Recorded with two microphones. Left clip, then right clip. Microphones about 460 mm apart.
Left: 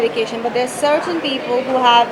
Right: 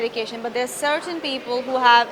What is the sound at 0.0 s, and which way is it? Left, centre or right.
Speech, right.